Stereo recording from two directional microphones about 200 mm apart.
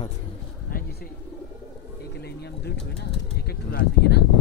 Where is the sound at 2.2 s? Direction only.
55° left (ahead or behind).